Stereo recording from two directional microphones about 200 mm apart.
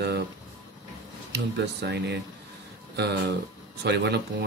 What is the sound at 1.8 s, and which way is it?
Speech, 55° right (ahead or behind).